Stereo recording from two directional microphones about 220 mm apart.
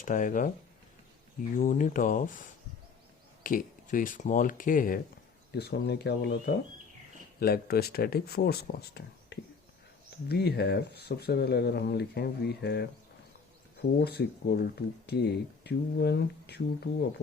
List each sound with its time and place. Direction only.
0.0 s speech: 35° left (ahead or behind)
1.5 s speech: 35° left (ahead or behind)
3.4 s speech: 40° left (ahead or behind)
5.5 s speech: 50° left (ahead or behind)
14.0 s speech: 45° left (ahead or behind)